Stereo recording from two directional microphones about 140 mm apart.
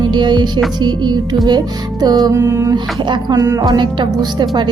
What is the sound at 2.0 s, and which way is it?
Music, 30° right (ahead or behind).